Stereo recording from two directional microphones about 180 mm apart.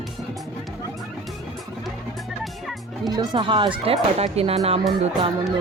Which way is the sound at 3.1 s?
25° right (ahead or behind).